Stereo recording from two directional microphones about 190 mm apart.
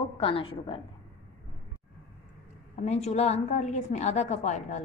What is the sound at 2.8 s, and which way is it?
Speech, 35° left (ahead or behind).